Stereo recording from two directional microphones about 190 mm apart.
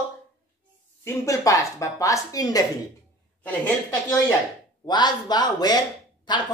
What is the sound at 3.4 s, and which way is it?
Speech, 10° left (ahead or behind).